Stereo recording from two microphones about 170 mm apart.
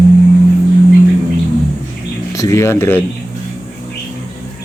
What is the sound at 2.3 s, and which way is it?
Speech, 15° left (ahead or behind).